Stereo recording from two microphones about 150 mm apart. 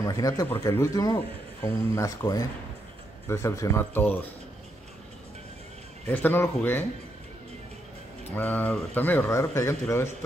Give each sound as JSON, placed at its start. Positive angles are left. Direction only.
{"t": 0.0, "sound": "speech", "side_deg": 20}
{"t": 6.0, "sound": "speech", "side_deg": 15}
{"t": 8.4, "sound": "speech", "side_deg": 10}